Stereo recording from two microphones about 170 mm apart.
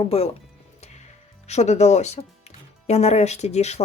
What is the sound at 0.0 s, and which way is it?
Speech, 35° left (ahead or behind).